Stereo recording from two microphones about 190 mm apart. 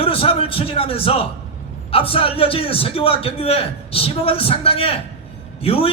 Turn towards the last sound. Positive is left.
turn(degrees=30)  # may be behind; listen again after turning